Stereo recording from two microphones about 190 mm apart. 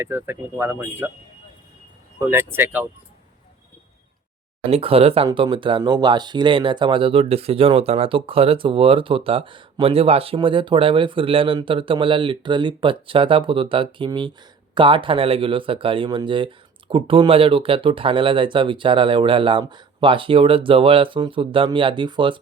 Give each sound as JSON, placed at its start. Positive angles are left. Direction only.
{"t": 0.0, "sound": "speech", "side_deg": -10}
{"t": 2.1, "sound": "speech", "side_deg": -10}
{"t": 4.7, "sound": "speech", "side_deg": -30}